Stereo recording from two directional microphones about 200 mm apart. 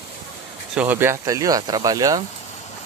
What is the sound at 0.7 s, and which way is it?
Speech, 10° right (ahead or behind).